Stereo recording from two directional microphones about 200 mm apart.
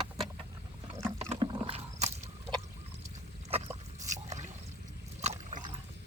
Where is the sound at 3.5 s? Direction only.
30° right (ahead or behind).